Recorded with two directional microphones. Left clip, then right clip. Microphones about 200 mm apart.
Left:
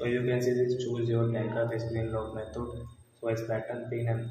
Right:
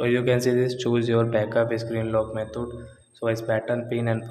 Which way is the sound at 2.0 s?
40° right (ahead or behind).